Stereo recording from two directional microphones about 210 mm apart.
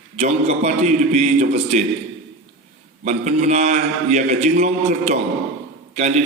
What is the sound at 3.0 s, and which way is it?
A man's voice, 35° right (ahead or behind).